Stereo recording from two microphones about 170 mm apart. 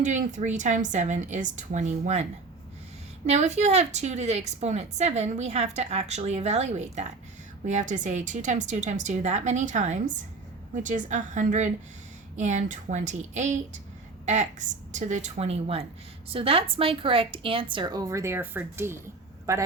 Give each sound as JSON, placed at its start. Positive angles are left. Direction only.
{"t": 0.0, "sound": "a woman's voice", "side_deg": -45}
{"t": 3.2, "sound": "a woman's voice", "side_deg": -40}